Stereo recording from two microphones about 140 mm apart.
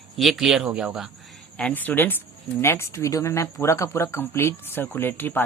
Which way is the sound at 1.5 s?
10° left (ahead or behind).